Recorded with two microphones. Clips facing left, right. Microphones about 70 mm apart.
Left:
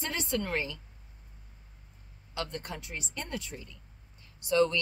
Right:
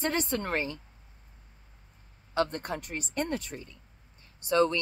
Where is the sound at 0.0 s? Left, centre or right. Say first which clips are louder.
Right 3 dB; right.